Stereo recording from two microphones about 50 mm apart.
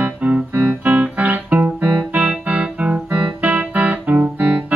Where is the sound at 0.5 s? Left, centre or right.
Right.